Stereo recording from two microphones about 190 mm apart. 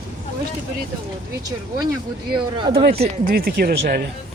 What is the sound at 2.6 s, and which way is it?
Speech, 25° right (ahead or behind).